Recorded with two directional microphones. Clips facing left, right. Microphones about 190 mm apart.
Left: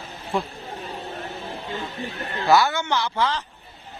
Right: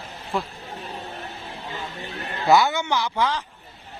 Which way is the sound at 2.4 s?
20° right (ahead or behind).